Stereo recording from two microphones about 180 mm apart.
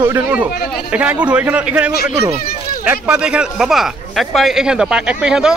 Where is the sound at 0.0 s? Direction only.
10° right (ahead or behind).